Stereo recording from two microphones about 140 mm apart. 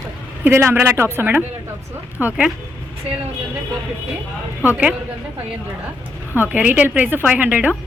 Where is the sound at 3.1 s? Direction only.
50° right (ahead or behind).